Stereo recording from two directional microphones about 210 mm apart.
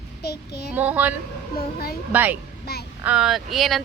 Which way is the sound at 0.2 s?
50° left (ahead or behind).